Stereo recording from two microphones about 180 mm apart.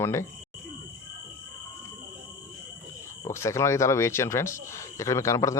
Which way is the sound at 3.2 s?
15° left (ahead or behind).